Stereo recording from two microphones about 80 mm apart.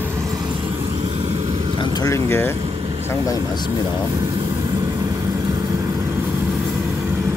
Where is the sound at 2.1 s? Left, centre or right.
Left.